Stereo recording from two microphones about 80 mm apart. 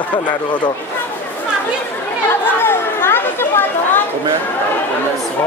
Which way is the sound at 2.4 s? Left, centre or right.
Left.